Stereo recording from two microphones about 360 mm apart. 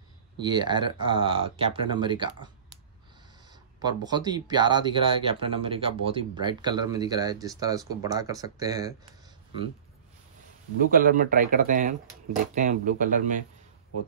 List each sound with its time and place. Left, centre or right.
0.4 s speech: centre
10.8 s speech: right